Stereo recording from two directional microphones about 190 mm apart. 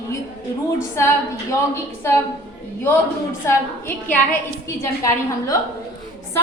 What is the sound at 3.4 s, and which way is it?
Speech, 10° left (ahead or behind).